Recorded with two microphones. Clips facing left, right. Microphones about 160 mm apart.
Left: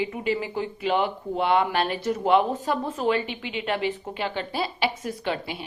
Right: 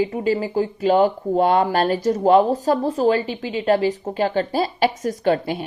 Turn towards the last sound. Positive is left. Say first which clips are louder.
# right 9 dB
turn(degrees=-45)  # may be behind; listen again after turning